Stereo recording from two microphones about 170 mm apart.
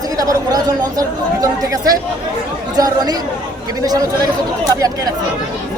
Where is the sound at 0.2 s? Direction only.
20° right (ahead or behind).